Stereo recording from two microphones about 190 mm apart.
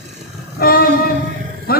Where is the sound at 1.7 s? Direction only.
55° left (ahead or behind).